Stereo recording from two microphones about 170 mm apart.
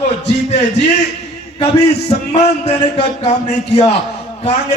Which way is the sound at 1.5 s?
40° left (ahead or behind).